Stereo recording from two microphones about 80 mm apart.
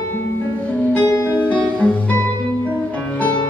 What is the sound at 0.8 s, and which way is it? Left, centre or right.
Music, centre.